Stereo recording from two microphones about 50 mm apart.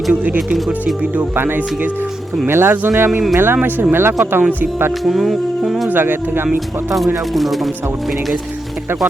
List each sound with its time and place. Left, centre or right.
1.4 s speech: right
5.0 s speech: centre
5.9 s speech: right
7.3 s speech: centre